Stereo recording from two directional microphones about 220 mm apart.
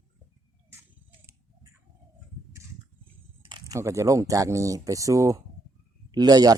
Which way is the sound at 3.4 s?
20° right (ahead or behind).